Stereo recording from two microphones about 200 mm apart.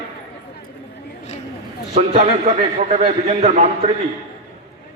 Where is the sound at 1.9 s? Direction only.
35° right (ahead or behind).